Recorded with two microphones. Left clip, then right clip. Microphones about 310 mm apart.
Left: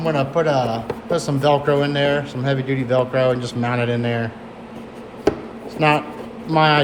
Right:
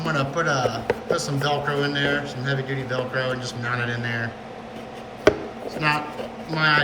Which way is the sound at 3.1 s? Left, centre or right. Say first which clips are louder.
Left 6 dB; left.